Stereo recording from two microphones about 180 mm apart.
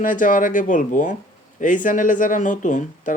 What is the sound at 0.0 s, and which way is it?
Speech, 45° left (ahead or behind).